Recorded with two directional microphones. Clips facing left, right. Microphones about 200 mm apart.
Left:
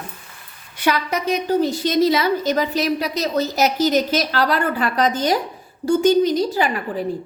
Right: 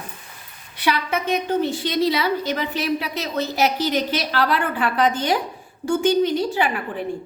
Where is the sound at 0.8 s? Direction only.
40° left (ahead or behind).